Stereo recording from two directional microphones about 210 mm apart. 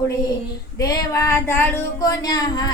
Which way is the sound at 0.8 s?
15° left (ahead or behind).